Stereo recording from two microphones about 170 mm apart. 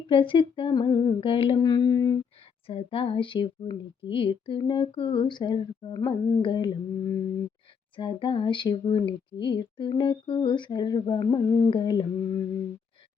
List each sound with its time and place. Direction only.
0.1 s speech: 30° left (ahead or behind)
2.6 s speech: 35° left (ahead or behind)